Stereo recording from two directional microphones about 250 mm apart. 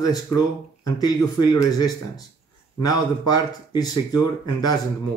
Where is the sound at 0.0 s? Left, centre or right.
Centre.